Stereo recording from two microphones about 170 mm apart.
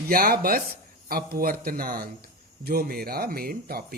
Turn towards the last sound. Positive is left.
turn(degrees=-60)  # may be behind; listen again after turning